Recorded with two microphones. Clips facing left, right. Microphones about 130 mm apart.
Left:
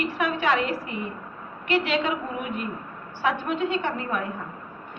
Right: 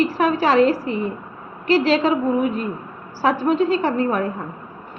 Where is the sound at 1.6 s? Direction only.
35° right (ahead or behind).